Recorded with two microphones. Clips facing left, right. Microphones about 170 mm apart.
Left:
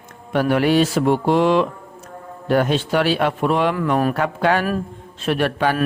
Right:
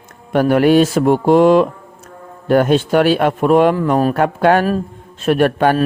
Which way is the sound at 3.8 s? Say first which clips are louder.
Right 4 dB; 35° right (ahead or behind).